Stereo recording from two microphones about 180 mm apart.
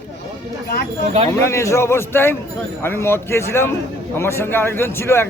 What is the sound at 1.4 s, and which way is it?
A man's voice, 15° left (ahead or behind).